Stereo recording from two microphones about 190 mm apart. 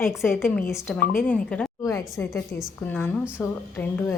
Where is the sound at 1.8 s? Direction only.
15° left (ahead or behind).